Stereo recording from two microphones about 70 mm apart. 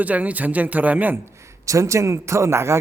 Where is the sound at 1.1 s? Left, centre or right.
Right.